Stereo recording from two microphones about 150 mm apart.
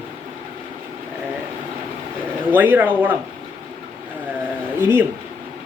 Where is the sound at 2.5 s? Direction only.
10° right (ahead or behind).